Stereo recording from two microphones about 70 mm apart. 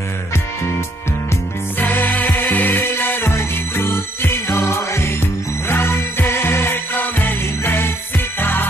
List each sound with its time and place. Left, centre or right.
1.8 s music: left